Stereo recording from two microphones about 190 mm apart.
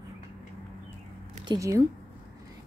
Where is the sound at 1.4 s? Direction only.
20° right (ahead or behind).